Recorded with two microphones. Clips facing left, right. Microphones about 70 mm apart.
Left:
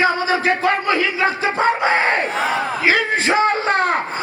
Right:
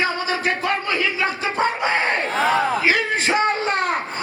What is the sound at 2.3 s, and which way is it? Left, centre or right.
Battle cry, centre.